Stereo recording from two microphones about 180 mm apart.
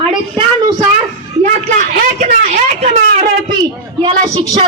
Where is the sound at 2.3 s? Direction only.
40° right (ahead or behind).